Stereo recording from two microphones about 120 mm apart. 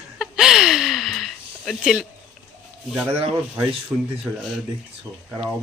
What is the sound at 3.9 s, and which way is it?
Speech, 15° right (ahead or behind).